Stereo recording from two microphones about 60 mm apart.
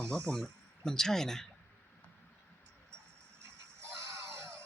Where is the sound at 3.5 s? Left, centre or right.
Right.